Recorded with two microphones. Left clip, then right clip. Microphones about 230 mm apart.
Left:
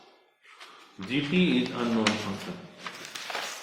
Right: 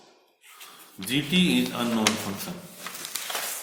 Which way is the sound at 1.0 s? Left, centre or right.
Centre.